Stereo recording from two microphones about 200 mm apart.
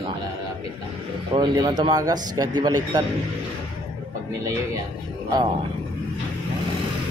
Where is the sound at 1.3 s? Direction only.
20° right (ahead or behind).